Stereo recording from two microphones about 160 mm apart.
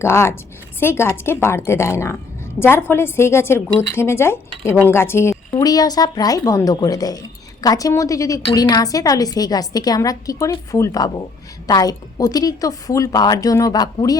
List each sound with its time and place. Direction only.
0.0 s a woman's voice: 15° left (ahead or behind)